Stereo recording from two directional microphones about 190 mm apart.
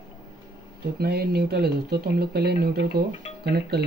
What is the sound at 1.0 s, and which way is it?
Speech, 55° right (ahead or behind).